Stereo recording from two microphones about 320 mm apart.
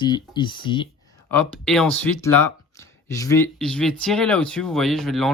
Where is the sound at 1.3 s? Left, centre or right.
Centre.